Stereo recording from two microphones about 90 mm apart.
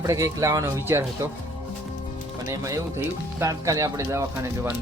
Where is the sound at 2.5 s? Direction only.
35° right (ahead or behind).